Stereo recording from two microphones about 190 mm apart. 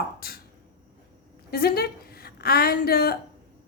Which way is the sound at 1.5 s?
55° left (ahead or behind).